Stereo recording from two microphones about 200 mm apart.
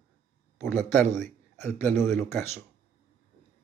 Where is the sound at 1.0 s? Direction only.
35° right (ahead or behind).